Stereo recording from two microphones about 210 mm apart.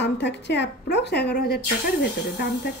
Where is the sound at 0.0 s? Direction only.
55° left (ahead or behind).